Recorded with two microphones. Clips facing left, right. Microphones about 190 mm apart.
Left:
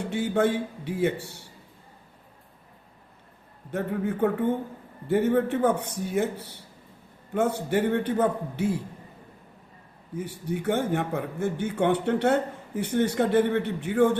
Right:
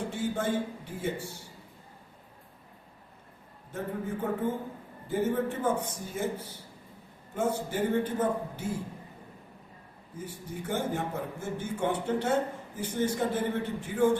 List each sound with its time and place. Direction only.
0.1 s a sound: 70° left (ahead or behind)
3.7 s a man's voice: 70° left (ahead or behind)
10.2 s a man's voice: 70° left (ahead or behind)